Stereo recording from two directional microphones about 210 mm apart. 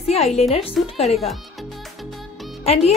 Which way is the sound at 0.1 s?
30° left (ahead or behind).